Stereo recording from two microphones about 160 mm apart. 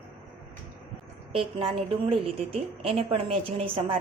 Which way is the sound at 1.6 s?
35° right (ahead or behind).